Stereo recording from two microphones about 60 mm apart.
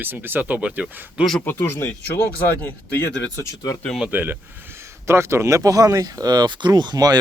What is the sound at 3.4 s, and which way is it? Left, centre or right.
Speech, left.